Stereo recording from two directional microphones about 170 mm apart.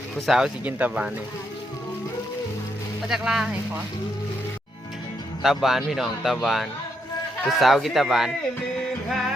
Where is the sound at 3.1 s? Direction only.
5° right (ahead or behind).